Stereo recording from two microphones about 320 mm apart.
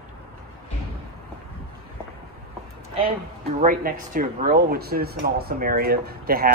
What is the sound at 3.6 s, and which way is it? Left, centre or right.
Speech, right.